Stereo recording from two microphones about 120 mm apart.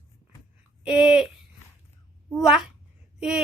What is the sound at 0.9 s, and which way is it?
Speech, 5° right (ahead or behind).